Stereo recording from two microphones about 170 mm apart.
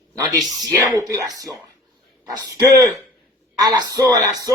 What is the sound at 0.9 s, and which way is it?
Speech, 20° right (ahead or behind).